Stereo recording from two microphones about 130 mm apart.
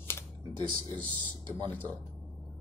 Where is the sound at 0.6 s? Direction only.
35° right (ahead or behind).